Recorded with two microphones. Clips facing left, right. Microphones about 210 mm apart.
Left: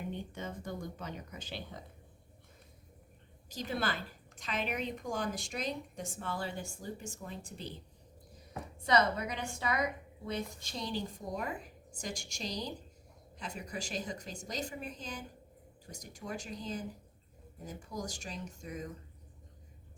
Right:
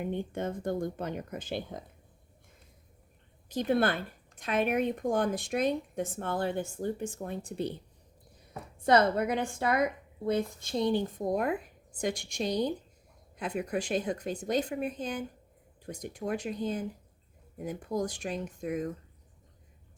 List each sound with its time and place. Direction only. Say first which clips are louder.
0.0 s a woman's voice: right 8 dB; 55° right (ahead or behind)
3.5 s a woman's voice: right 9 dB; 60° right (ahead or behind)
8.8 s a woman's voice: right 6 dB; 55° right (ahead or behind)
17.6 s a woman's voice: right 9 dB; 60° right (ahead or behind)